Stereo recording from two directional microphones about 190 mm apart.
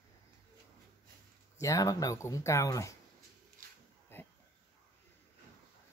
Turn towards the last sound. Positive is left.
turn(degrees=10)  # may be behind; listen again after turning